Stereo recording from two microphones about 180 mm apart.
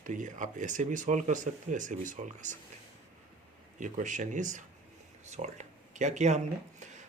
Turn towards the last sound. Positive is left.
turn(degrees=-40)  # may be behind; listen again after turning